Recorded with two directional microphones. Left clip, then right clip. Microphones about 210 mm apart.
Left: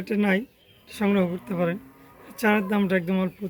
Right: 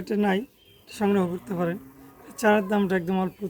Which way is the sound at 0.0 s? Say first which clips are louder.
Left 1 dB; 20° right (ahead or behind).